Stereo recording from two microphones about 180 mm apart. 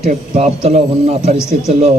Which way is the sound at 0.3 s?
40° right (ahead or behind).